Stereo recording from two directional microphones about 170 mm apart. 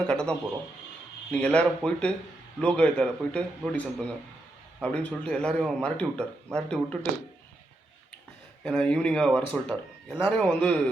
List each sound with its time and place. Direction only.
0.0 s a man's voice: 5° left (ahead or behind)
8.6 s speech: 5° left (ahead or behind)